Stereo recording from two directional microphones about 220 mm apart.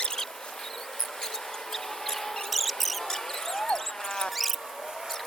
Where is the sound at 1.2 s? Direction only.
Centre (ahead or behind).